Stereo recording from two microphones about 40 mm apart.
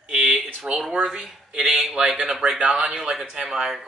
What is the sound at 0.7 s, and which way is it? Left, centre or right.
Speech, centre.